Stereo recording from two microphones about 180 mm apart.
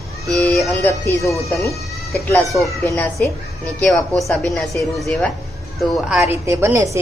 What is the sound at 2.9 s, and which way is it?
Speech, 10° left (ahead or behind).